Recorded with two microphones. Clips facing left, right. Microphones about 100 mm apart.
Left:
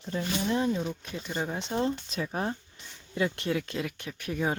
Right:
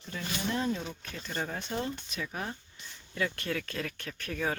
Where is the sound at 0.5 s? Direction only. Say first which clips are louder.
Left 4 dB; 15° left (ahead or behind); by 2.5 s 30° left (ahead or behind).